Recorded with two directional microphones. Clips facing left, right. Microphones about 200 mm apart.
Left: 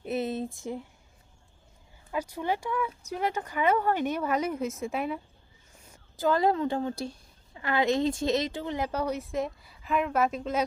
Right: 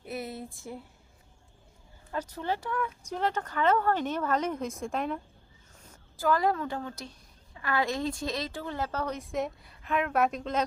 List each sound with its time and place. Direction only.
0.0 s a sound: 20° left (ahead or behind)
2.1 s speech: 10° left (ahead or behind)
6.1 s a woman's voice: 25° left (ahead or behind); by 10.6 s 5° left (ahead or behind)